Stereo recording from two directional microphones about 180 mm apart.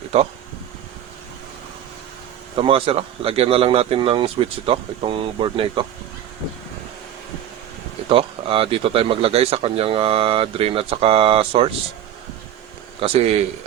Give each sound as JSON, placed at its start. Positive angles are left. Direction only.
{"t": 0.1, "sound": "speech", "side_deg": -35}
{"t": 2.6, "sound": "speech", "side_deg": -30}
{"t": 8.1, "sound": "speech", "side_deg": -30}
{"t": 13.0, "sound": "speech", "side_deg": -35}